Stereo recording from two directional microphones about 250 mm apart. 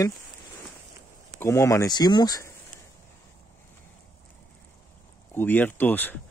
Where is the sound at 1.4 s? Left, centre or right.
Centre.